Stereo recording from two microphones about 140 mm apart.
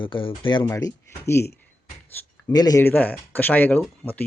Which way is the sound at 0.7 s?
20° left (ahead or behind).